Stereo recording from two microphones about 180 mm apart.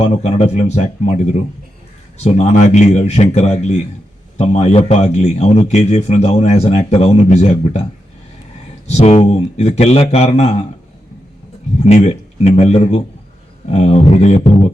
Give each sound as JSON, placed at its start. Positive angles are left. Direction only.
{"t": 0.0, "sound": "a man's voice", "side_deg": 35}
{"t": 8.9, "sound": "a man's voice", "side_deg": 35}
{"t": 11.8, "sound": "a man's voice", "side_deg": 40}